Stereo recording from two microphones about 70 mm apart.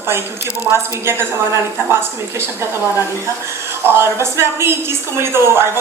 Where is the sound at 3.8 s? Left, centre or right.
Right.